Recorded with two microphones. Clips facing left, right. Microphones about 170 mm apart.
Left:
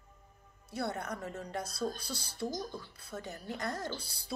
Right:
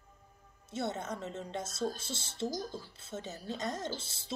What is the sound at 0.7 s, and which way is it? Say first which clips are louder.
A woman's voice: even; 20° right (ahead or behind).